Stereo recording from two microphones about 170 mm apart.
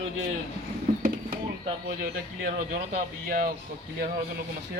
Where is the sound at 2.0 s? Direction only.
60° right (ahead or behind).